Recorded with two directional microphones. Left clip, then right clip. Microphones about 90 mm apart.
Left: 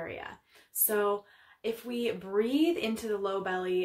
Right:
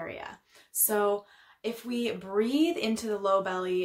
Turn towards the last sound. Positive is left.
turn(degrees=-35)  # may be behind; listen again after turning